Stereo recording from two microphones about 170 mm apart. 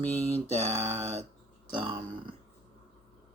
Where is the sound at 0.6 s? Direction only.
35° right (ahead or behind).